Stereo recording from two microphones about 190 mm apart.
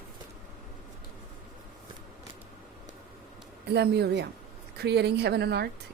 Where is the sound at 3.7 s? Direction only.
60° right (ahead or behind).